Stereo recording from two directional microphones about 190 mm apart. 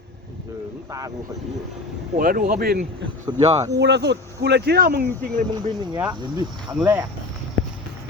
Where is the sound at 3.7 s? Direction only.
65° right (ahead or behind).